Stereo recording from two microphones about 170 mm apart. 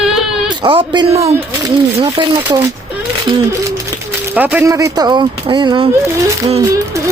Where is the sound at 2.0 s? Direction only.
30° right (ahead or behind).